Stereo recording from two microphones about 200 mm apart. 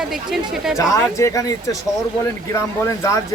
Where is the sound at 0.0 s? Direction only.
Centre (ahead or behind).